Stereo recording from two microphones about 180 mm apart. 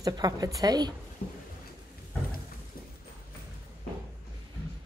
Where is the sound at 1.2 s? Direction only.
60° left (ahead or behind).